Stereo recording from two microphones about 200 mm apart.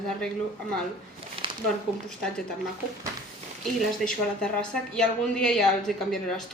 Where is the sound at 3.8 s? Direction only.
Centre (ahead or behind).